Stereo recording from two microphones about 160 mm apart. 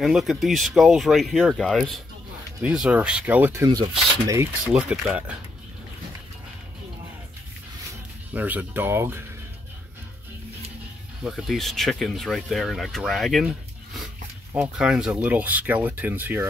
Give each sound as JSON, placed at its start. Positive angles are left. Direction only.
{"t": 0.0, "sound": "speech", "side_deg": 0}
{"t": 3.6, "sound": "speech", "side_deg": -25}
{"t": 4.7, "sound": "speech", "side_deg": -5}
{"t": 8.3, "sound": "speech", "side_deg": -10}
{"t": 11.2, "sound": "speech", "side_deg": 0}